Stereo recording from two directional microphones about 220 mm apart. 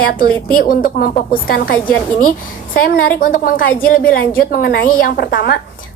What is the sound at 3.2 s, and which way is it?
A woman's voice, 40° left (ahead or behind).